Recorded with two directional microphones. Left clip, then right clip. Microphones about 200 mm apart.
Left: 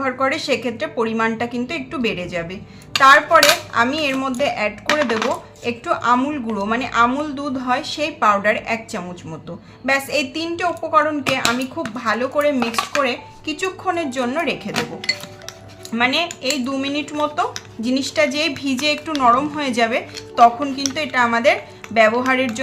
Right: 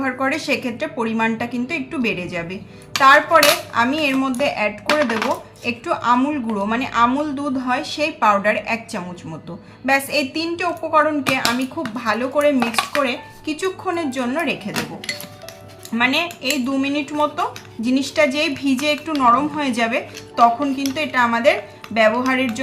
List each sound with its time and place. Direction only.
0.0 s a woman's voice: 20° left (ahead or behind)
15.9 s speech: 20° left (ahead or behind)